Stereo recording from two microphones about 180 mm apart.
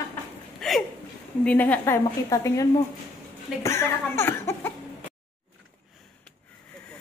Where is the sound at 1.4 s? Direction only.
10° left (ahead or behind).